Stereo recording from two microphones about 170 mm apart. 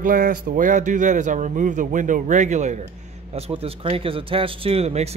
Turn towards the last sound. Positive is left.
turn(degrees=-40)  # may be behind; listen again after turning